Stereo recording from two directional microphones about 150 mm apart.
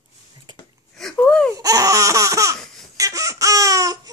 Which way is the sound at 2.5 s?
5° left (ahead or behind).